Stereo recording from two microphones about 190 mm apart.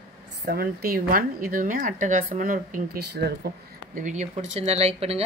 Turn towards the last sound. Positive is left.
turn(degrees=-30)  # may be behind; listen again after turning